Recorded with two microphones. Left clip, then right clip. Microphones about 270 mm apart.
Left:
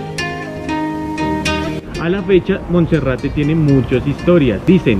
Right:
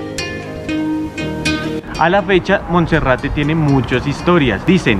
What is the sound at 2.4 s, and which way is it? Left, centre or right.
Speech, centre.